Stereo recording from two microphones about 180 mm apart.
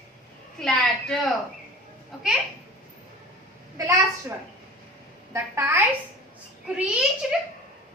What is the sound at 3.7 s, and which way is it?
A woman's voice, 15° right (ahead or behind).